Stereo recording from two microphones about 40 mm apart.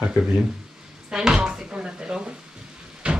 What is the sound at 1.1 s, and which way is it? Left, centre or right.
Speech, centre.